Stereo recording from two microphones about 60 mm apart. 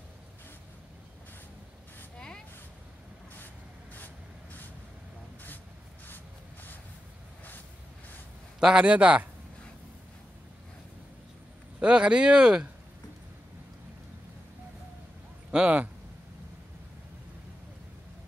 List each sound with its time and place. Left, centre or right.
2.1 s a sound: centre
3.9 s vehicle: left
6.0 s a sound: left
8.5 s a man's voice: centre
11.8 s speech: centre
15.5 s a man's voice: right